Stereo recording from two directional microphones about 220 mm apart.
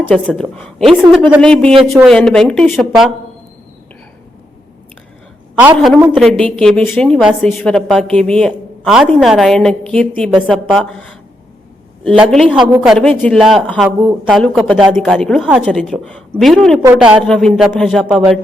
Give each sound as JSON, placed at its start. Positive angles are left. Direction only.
{"t": 0.0, "sound": "a woman's voice", "side_deg": -5}
{"t": 5.7, "sound": "a woman's voice", "side_deg": 0}
{"t": 12.0, "sound": "a woman's voice", "side_deg": 0}